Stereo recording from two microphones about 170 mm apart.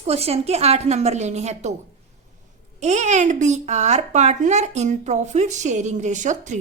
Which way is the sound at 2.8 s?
40° right (ahead or behind).